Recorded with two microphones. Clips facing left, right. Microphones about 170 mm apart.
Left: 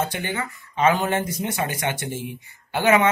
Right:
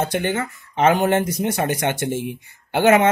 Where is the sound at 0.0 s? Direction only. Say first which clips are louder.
Right 5 dB; 55° right (ahead or behind).